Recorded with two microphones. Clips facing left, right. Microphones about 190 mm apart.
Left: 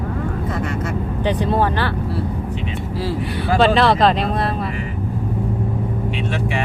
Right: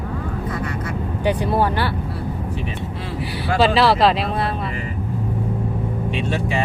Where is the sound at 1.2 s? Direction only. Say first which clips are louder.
Even; 10° right (ahead or behind).